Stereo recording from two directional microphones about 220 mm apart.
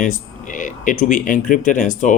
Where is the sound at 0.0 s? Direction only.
35° left (ahead or behind).